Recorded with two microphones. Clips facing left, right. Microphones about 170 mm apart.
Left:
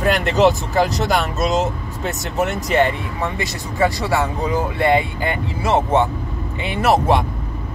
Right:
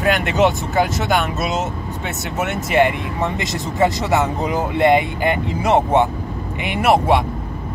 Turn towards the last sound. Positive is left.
turn(degrees=-10)  # may be behind; listen again after turning